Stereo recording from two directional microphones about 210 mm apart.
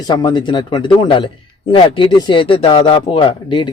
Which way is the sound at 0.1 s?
20° left (ahead or behind).